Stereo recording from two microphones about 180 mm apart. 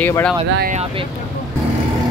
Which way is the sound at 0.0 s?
10° left (ahead or behind).